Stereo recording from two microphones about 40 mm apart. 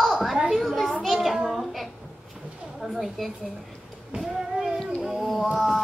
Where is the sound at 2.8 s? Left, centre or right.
Centre.